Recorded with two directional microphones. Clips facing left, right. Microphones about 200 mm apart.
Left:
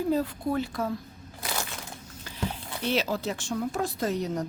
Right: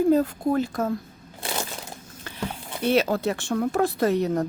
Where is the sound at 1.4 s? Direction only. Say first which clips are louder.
Right 4 dB; 25° right (ahead or behind).